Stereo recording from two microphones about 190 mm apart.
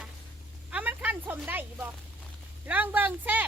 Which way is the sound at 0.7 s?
10° right (ahead or behind).